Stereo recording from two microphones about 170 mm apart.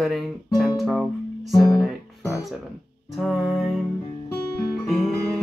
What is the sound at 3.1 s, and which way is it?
Music, centre (ahead or behind).